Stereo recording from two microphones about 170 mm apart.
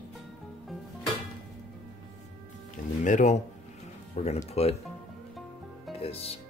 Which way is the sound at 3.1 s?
45° left (ahead or behind).